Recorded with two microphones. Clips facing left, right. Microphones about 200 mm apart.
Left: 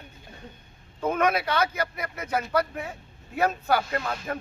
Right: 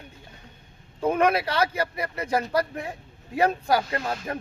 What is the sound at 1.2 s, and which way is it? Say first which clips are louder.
A man's voice: right 1 dB; 30° right (ahead or behind).